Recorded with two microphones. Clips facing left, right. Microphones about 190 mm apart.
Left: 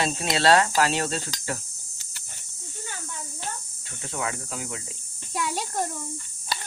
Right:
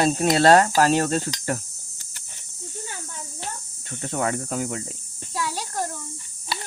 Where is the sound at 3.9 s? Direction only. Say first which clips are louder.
Right 6 dB; 50° right (ahead or behind).